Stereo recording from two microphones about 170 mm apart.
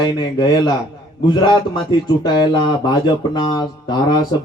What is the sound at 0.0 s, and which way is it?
A man's voice, 25° left (ahead or behind).